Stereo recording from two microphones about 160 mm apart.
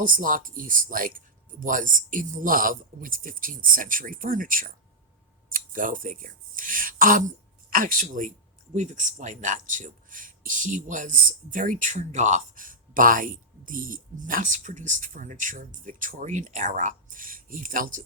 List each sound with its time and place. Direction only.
0.0 s speech: 60° right (ahead or behind)